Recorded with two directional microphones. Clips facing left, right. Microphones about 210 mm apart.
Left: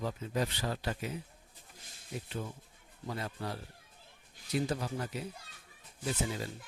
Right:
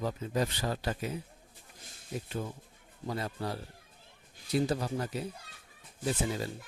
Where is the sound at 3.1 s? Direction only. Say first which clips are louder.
Right 3 dB; 35° right (ahead or behind).